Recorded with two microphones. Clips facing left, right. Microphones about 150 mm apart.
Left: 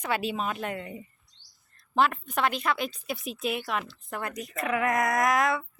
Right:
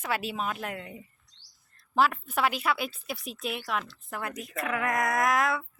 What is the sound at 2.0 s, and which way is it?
Speech, 5° right (ahead or behind).